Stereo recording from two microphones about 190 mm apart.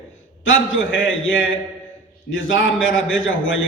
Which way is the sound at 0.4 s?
90° left.